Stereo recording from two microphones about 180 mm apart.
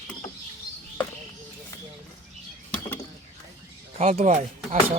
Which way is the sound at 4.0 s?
35° right (ahead or behind).